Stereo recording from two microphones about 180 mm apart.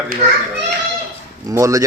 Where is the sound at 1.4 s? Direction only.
15° right (ahead or behind).